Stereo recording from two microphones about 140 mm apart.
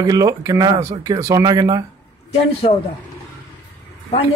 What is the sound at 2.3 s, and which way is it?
Speech, 40° left (ahead or behind).